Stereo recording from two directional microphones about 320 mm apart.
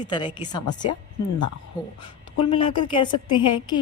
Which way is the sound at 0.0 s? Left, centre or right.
Centre.